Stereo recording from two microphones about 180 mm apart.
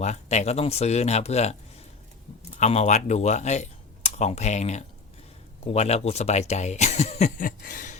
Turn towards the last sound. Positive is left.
turn(degrees=50)  # may be behind; listen again after turning